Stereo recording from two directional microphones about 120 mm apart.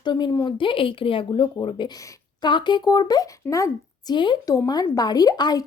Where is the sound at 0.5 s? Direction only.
45° left (ahead or behind); by 4.1 s 25° left (ahead or behind).